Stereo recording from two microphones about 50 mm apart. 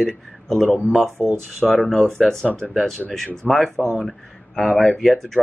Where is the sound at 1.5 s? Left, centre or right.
Centre.